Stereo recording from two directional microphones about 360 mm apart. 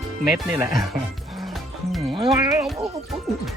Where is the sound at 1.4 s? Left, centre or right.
Centre.